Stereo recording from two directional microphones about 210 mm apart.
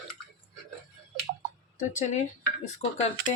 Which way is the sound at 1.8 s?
35° left (ahead or behind).